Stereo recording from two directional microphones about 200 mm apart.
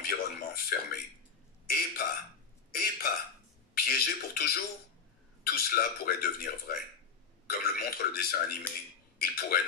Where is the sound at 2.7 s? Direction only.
50° left (ahead or behind).